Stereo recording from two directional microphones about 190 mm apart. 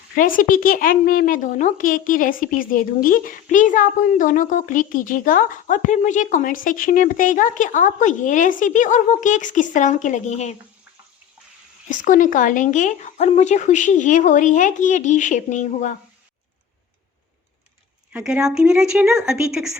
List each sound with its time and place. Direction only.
0.2 s speech: 45° left (ahead or behind)
11.9 s speech: 45° left (ahead or behind)
18.1 s speech: 5° right (ahead or behind)